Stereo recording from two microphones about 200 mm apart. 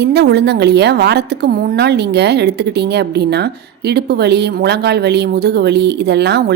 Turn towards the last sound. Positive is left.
turn(degrees=-55)  # may be behind; listen again after turning